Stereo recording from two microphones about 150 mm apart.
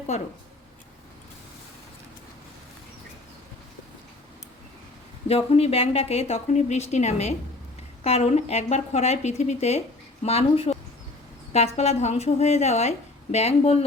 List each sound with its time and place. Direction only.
5.3 s speech: 45° left (ahead or behind)